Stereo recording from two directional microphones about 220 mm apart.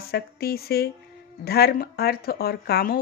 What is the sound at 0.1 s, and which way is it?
Speech, 45° left (ahead or behind).